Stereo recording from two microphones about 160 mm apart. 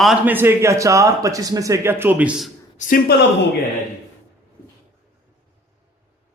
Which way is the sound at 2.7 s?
55° left (ahead or behind).